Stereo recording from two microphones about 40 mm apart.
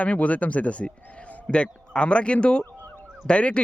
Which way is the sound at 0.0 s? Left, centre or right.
Left.